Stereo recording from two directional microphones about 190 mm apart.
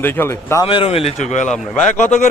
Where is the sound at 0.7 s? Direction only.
30° left (ahead or behind).